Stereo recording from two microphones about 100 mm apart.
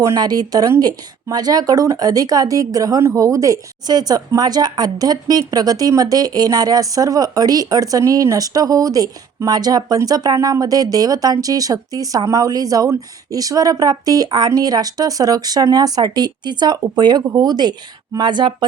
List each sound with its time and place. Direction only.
0.0 s a woman's voice: 40° right (ahead or behind)